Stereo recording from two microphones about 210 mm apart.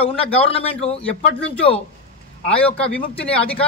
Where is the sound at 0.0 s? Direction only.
25° left (ahead or behind).